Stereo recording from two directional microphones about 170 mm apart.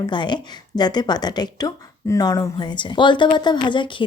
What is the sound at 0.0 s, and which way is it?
A woman's voice, 25° left (ahead or behind).